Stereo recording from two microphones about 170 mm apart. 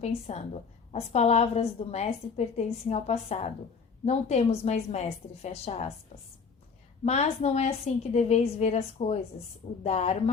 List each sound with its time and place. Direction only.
0.0 s a woman's voice: 40° left (ahead or behind)
7.0 s a woman's voice: 40° left (ahead or behind)